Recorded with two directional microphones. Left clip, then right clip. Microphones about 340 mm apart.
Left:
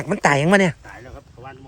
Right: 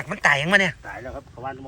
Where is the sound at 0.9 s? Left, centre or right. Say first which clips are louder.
Right 5 dB; centre.